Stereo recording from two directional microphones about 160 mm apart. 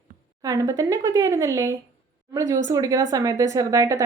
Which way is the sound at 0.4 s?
20° right (ahead or behind).